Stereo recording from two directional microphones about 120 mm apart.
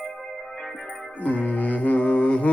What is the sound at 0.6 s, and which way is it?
Music, 5° left (ahead or behind).